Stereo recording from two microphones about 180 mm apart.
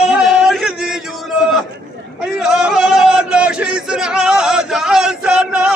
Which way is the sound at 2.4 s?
5° right (ahead or behind).